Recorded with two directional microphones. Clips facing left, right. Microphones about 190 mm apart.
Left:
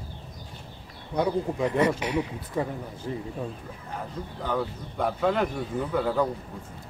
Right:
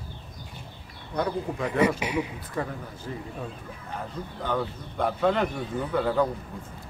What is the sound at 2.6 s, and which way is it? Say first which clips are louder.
Speech: left 2 dB; 15° left (ahead or behind).